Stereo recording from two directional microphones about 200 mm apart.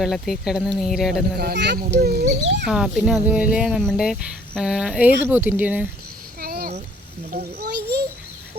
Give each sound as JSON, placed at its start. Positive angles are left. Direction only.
{"t": 0.0, "sound": "cricket", "side_deg": 0}
{"t": 1.4, "sound": "a child's voice", "side_deg": -55}
{"t": 2.6, "sound": "cricket", "side_deg": -5}
{"t": 5.2, "sound": "speech", "side_deg": -10}
{"t": 6.4, "sound": "a sound", "side_deg": -50}
{"t": 7.3, "sound": "a child's voice", "side_deg": -55}